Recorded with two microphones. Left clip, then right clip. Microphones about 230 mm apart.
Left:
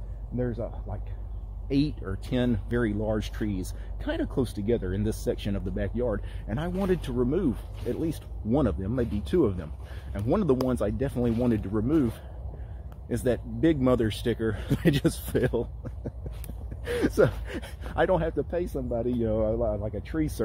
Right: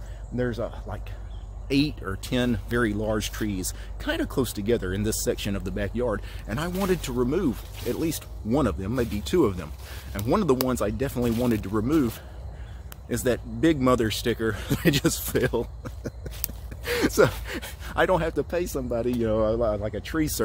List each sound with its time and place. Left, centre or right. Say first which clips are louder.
0.4 s speech: right 4 dB; centre